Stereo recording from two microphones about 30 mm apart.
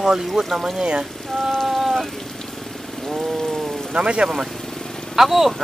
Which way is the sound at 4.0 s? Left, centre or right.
Right.